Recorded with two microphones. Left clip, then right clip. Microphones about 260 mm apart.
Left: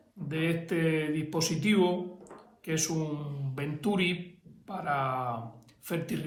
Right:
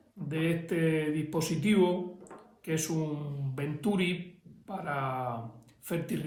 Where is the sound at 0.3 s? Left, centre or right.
Left.